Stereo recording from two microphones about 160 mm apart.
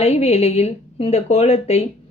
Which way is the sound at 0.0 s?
40° left (ahead or behind).